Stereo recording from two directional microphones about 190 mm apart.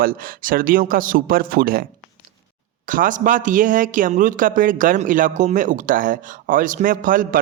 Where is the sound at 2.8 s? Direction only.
45° right (ahead or behind).